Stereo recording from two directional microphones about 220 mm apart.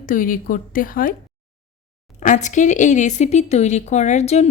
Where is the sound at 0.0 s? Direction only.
40° left (ahead or behind).